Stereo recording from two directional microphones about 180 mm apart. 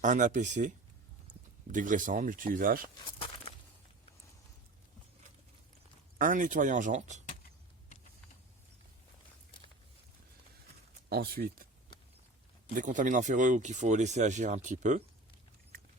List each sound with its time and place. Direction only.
0.0 s speech: 45° right (ahead or behind)
6.1 s speech: 50° right (ahead or behind)
11.1 s speech: 60° right (ahead or behind)
12.7 s speech: 45° right (ahead or behind)